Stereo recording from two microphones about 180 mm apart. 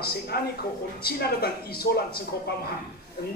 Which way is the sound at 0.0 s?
60° left (ahead or behind).